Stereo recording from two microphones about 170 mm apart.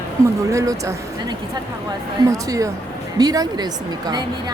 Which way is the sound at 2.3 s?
20° right (ahead or behind).